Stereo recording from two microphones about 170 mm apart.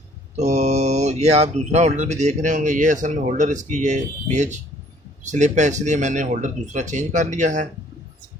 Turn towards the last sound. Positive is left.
turn(degrees=-45)  # may be behind; listen again after turning